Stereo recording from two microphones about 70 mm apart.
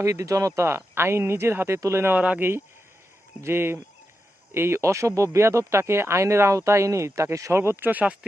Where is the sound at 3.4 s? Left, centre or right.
Right.